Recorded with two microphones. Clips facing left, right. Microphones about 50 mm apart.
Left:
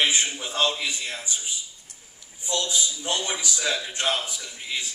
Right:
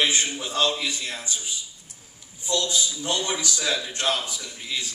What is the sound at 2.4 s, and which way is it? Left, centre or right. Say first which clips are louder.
A man's voice: right 2 dB; left.